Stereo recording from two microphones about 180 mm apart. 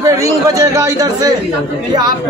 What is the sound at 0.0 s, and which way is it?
A man's voice, 15° right (ahead or behind).